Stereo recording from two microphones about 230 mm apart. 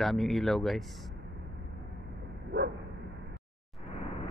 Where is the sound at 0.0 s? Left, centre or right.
Centre.